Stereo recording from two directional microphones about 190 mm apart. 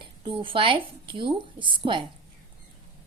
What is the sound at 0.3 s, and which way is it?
Speech, 25° right (ahead or behind).